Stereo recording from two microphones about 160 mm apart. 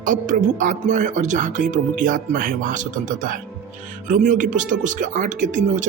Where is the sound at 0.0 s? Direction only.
55° right (ahead or behind).